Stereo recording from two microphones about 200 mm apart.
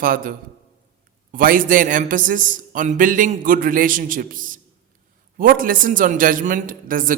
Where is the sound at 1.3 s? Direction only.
45° right (ahead or behind).